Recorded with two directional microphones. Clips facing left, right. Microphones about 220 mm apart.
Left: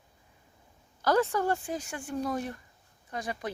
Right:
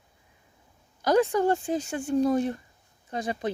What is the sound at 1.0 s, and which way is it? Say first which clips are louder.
A woman's voice: right 4 dB; 15° right (ahead or behind).